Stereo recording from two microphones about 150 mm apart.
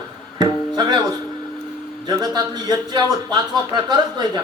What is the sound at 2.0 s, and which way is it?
Speech, 25° right (ahead or behind).